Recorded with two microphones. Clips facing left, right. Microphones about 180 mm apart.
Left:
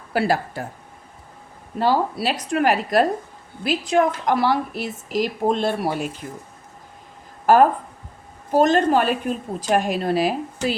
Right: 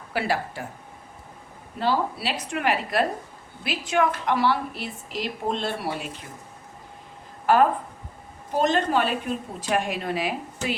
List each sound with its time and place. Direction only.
0.1 s speech: 40° left (ahead or behind)
1.8 s a woman's voice: 45° left (ahead or behind)
7.4 s a woman's voice: 40° left (ahead or behind)